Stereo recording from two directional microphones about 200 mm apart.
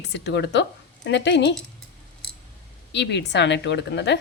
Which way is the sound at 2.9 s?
60° left (ahead or behind).